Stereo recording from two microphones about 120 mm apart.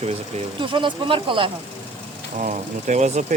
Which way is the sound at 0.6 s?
45° right (ahead or behind).